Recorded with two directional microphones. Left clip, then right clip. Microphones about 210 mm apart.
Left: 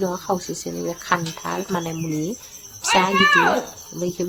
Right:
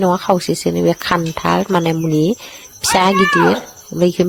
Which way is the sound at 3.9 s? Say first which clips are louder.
Right 12 dB; 35° right (ahead or behind).